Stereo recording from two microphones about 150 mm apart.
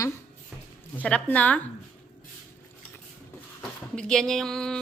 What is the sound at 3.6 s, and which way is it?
Speech, 5° left (ahead or behind).